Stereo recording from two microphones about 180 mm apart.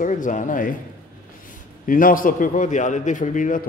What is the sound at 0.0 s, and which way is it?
Speech, 45° left (ahead or behind).